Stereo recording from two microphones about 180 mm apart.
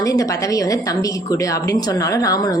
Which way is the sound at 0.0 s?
20° left (ahead or behind).